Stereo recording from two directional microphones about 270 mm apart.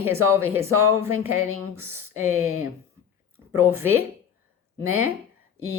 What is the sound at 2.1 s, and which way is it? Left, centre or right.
Speech, right.